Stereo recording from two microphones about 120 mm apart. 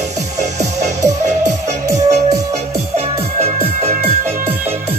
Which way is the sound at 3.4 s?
65° right (ahead or behind).